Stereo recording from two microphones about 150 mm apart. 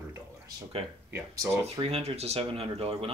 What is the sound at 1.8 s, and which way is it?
Speech, 40° right (ahead or behind).